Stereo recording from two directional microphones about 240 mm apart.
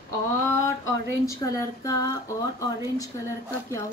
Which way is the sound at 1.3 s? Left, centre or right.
Centre.